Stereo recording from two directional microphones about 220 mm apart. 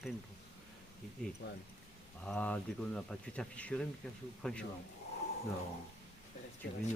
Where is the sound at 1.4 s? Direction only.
50° left (ahead or behind).